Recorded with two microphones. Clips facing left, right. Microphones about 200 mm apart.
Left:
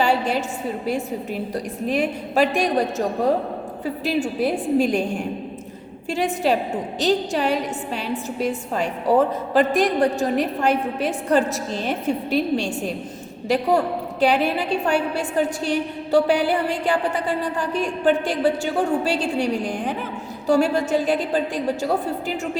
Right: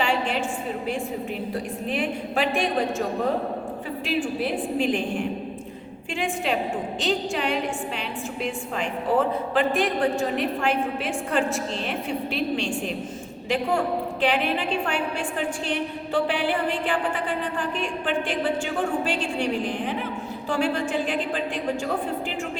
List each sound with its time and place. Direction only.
0.0 s a sound: 40° left (ahead or behind)
0.9 s a woman's voice: 40° left (ahead or behind)
4.0 s a woman's voice: 40° left (ahead or behind)
6.1 s a woman's voice: 40° left (ahead or behind)
20.5 s a woman's voice: 40° left (ahead or behind)